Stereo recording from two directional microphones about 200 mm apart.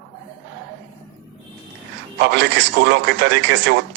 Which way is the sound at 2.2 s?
55° right (ahead or behind).